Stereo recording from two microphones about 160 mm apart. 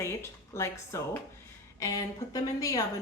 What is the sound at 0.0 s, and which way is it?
Speech, 15° left (ahead or behind).